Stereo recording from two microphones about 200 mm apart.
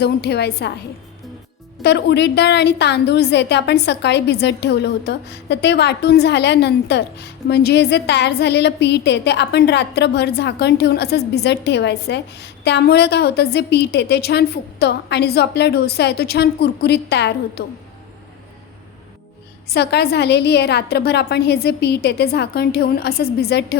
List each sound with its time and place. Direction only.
0.0 s a woman's voice: 55° left (ahead or behind)
1.8 s a woman's voice: 60° left (ahead or behind)
19.6 s a woman's voice: 55° left (ahead or behind)